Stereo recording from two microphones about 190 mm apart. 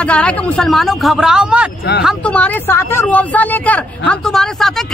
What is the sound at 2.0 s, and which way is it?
Speech, 5° left (ahead or behind).